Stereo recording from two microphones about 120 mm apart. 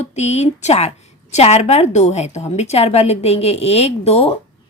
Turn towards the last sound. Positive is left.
turn(degrees=55)  # may be behind; listen again after turning